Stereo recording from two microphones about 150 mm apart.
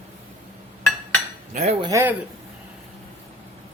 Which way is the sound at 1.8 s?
20° right (ahead or behind).